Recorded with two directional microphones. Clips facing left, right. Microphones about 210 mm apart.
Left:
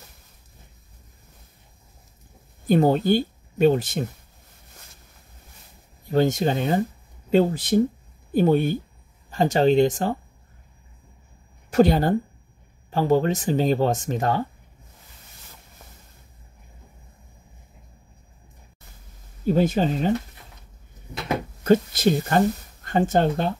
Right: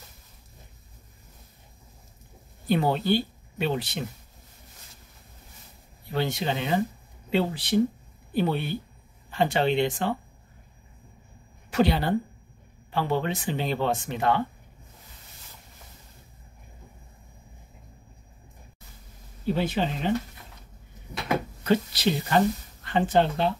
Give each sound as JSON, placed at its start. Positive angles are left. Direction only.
{"t": 2.6, "sound": "speech", "side_deg": 45}
{"t": 6.0, "sound": "speech", "side_deg": 45}
{"t": 11.7, "sound": "speech", "side_deg": 45}
{"t": 19.4, "sound": "speech", "side_deg": 45}
{"t": 21.6, "sound": "speech", "side_deg": 45}